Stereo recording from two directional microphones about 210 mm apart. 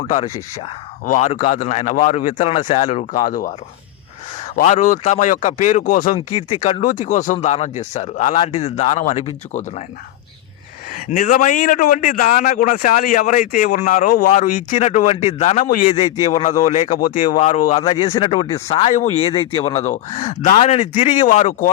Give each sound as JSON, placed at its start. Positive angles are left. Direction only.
{"t": 0.0, "sound": "a man's voice", "side_deg": 30}
{"t": 2.6, "sound": "speech", "side_deg": 20}
{"t": 2.8, "sound": "a man's voice", "side_deg": 40}
{"t": 6.1, "sound": "a man's voice", "side_deg": 25}
{"t": 10.9, "sound": "a man's voice", "side_deg": 40}
{"t": 17.8, "sound": "a man's voice", "side_deg": 25}